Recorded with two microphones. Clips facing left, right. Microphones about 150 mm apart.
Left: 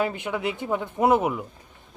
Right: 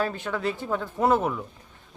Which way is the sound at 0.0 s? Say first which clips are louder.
Left 1 dB; 15° left (ahead or behind).